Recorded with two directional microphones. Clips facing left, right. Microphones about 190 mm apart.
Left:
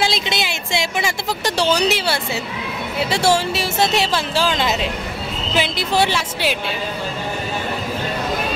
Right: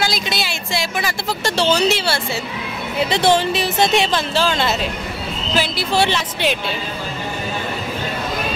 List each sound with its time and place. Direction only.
0.1 s a woman's voice: 20° left (ahead or behind)